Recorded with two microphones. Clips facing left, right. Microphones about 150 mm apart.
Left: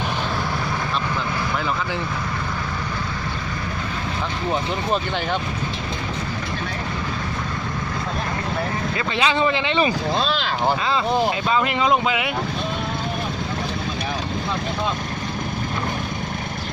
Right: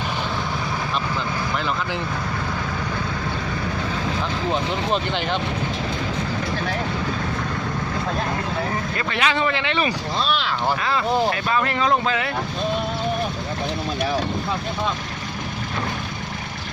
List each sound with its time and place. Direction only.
4.9 s speech: 5° left (ahead or behind)
9.1 s speech: 25° left (ahead or behind)